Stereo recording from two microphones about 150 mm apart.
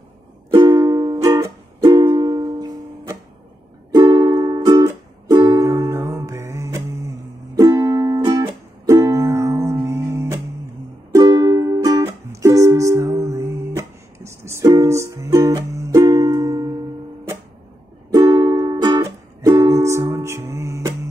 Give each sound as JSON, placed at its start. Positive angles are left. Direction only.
{"t": 0.5, "sound": "music", "side_deg": -25}
{"t": 18.1, "sound": "music", "side_deg": -25}